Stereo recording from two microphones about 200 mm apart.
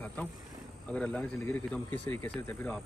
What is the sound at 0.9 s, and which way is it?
Speech, 5° left (ahead or behind).